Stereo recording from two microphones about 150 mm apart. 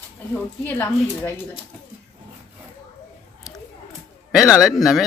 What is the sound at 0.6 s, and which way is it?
Speech, 15° left (ahead or behind).